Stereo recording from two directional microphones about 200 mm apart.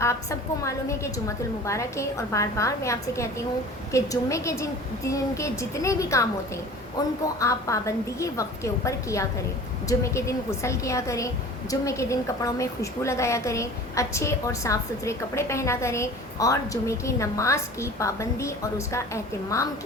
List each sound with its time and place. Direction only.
0.0 s a woman's voice: 15° left (ahead or behind)
7.3 s a woman's voice: 15° left (ahead or behind)